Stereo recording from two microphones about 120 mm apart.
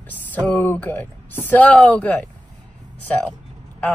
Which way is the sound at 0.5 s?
15° left (ahead or behind).